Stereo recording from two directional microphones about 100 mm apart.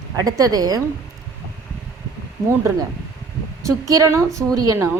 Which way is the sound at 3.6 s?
35° right (ahead or behind).